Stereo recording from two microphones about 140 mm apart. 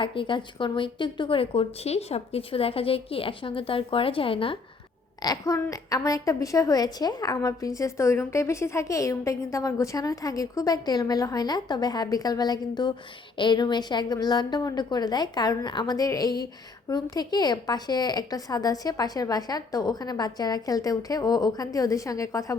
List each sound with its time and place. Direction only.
0.0 s a woman's voice: 35° left (ahead or behind)
5.2 s a woman's voice: 25° left (ahead or behind)